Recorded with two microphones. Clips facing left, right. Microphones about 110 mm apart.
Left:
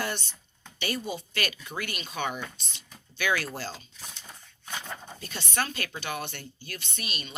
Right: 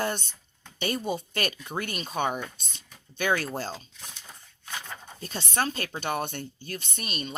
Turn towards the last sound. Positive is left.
turn(degrees=-40)  # may be behind; listen again after turning